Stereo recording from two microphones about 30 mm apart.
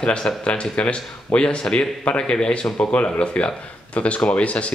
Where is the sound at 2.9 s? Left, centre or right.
Left.